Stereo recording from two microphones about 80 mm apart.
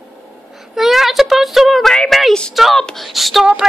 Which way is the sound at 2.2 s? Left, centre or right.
Centre.